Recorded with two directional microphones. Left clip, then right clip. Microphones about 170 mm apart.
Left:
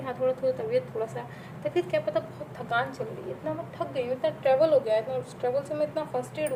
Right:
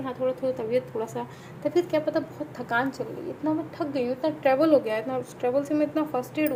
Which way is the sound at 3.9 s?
35° right (ahead or behind).